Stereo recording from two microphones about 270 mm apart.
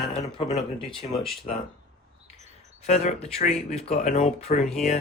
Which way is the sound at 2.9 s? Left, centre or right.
Left.